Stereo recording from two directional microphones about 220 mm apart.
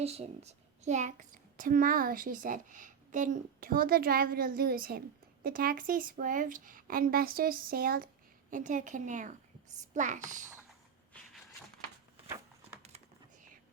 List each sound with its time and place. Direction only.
0.0 s a child's voice: 30° right (ahead or behind)